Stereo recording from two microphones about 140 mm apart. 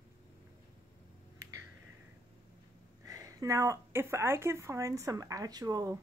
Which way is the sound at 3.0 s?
25° right (ahead or behind).